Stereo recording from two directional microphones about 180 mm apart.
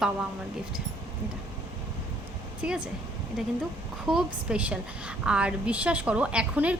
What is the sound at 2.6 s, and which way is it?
Speech, 5° right (ahead or behind).